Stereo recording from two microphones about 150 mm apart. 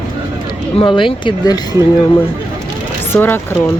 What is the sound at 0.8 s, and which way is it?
Speech, 35° left (ahead or behind).